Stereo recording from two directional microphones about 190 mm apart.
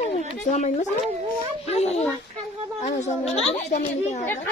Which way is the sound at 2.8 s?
35° left (ahead or behind).